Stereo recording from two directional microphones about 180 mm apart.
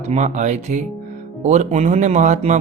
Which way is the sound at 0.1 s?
40° right (ahead or behind).